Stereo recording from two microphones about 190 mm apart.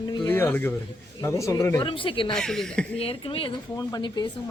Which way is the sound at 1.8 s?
25° left (ahead or behind).